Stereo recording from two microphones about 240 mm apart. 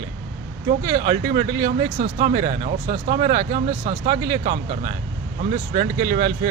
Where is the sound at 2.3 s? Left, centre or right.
Right.